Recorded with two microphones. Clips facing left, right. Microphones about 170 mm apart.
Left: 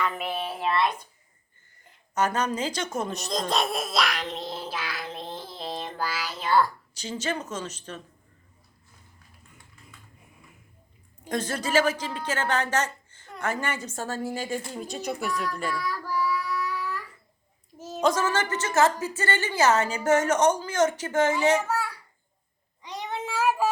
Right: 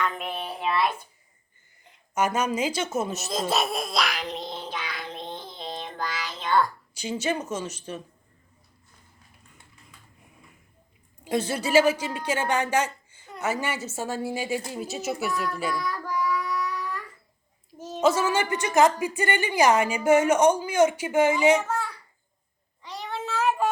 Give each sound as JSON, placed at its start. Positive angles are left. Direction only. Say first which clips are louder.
{"t": 0.0, "sound": "child singing", "louder": "left 1 dB", "side_deg": 5}
{"t": 2.1, "sound": "a sound", "louder": "right 1 dB", "side_deg": -10}
{"t": 6.9, "sound": "a woman's voice", "louder": "right 6 dB", "side_deg": -10}
{"t": 11.3, "sound": "a woman's voice", "louder": "right 3 dB", "side_deg": -10}
{"t": 15.7, "sound": "child singing", "louder": "right 1 dB", "side_deg": 5}
{"t": 17.7, "sound": "a sound", "louder": "right 2 dB", "side_deg": 5}
{"t": 18.1, "sound": "a woman's voice", "louder": "right 2 dB", "side_deg": -10}
{"t": 21.7, "sound": "a sound", "louder": "left 1 dB", "side_deg": 10}
{"t": 22.8, "sound": "child singing", "louder": "left 1 dB", "side_deg": 20}